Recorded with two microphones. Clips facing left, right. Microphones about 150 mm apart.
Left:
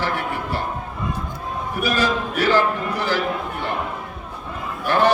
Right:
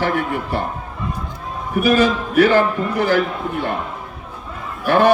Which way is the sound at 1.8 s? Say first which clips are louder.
Right 6 dB; 55° right (ahead or behind).